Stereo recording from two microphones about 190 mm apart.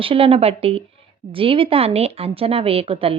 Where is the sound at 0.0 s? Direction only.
30° right (ahead or behind).